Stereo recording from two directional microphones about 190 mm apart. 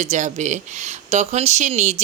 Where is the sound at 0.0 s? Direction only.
40° right (ahead or behind).